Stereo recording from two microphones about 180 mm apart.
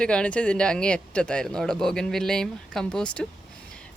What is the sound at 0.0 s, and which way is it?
Speech, 5° left (ahead or behind).